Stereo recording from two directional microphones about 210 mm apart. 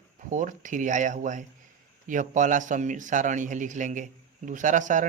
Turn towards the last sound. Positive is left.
turn(degrees=-35)  # may be behind; listen again after turning